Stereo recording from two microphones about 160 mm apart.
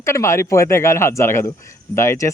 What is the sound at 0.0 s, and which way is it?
Speech, 15° left (ahead or behind).